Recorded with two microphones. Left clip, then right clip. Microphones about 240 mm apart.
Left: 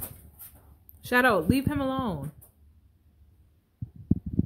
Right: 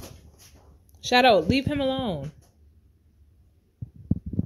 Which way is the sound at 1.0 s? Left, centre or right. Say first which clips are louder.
Right 4 dB; centre.